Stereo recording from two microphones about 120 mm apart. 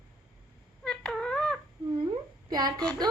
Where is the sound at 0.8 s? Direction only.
5° left (ahead or behind).